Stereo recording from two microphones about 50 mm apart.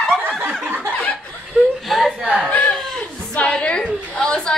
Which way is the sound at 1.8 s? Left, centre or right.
Centre.